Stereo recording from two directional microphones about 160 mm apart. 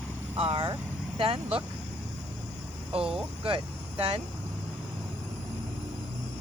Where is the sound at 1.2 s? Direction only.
35° right (ahead or behind).